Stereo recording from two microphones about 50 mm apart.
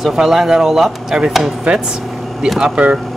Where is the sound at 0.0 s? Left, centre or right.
Centre.